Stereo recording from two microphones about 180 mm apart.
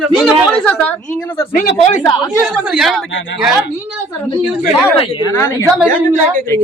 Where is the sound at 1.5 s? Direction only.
40° left (ahead or behind).